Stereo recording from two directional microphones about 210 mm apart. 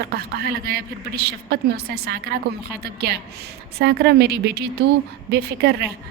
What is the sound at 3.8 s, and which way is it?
A woman's voice, 55° right (ahead or behind).